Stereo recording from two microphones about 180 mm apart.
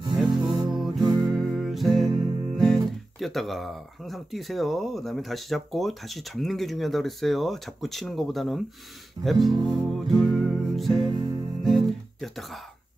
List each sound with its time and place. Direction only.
0.1 s music: centre (ahead or behind)
0.4 s music: 25° right (ahead or behind)
0.7 s music: centre (ahead or behind)
2.5 s speech: centre (ahead or behind)
9.2 s music: centre (ahead or behind)
11.6 s guitar: centre (ahead or behind)